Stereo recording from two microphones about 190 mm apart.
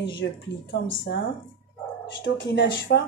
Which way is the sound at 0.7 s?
75° left (ahead or behind).